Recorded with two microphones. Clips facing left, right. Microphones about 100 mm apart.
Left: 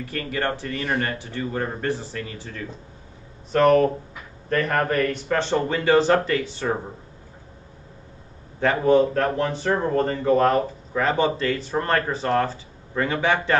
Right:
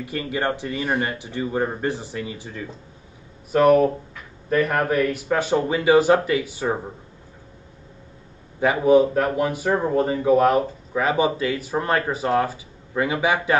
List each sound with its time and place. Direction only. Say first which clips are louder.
0.0 s speech: right 2 dB; 20° right (ahead or behind)
8.5 s speech: right 2 dB; 10° right (ahead or behind)